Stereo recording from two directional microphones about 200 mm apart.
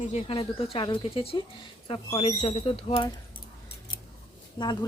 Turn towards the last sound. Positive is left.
turn(degrees=20)  # may be behind; listen again after turning